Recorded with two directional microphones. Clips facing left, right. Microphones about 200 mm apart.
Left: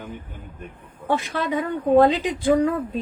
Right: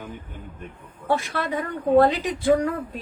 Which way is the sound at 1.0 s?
15° left (ahead or behind).